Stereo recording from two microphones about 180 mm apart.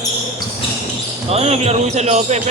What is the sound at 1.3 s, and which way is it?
Speech, 35° right (ahead or behind).